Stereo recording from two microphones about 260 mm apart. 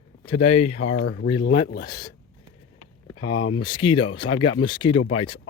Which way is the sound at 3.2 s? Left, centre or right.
Left.